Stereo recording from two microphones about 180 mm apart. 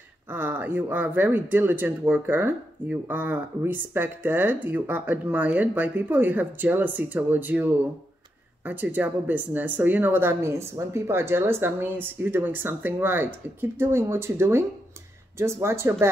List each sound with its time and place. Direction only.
0.3 s speech: 10° right (ahead or behind)